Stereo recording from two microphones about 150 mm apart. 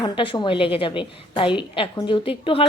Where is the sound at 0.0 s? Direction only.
30° left (ahead or behind).